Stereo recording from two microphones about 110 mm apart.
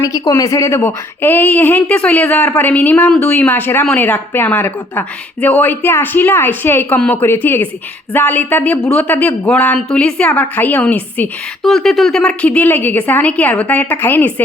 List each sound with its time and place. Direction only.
0.0 s speech: 30° left (ahead or behind); by 11.3 s 15° left (ahead or behind)
11.6 s speech: 5° left (ahead or behind)